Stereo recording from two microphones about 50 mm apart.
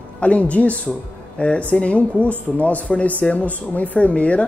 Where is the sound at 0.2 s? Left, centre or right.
Left.